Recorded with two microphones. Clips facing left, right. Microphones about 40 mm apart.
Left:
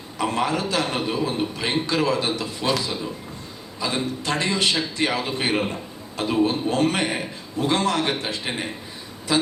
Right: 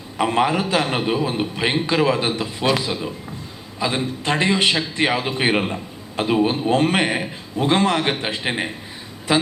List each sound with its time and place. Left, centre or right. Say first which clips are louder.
0.2 s a man's voice: right 4 dB; right